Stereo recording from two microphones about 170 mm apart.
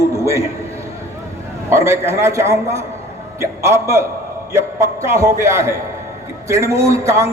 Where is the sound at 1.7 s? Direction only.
15° right (ahead or behind).